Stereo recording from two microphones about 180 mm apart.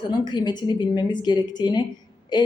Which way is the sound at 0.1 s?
25° left (ahead or behind).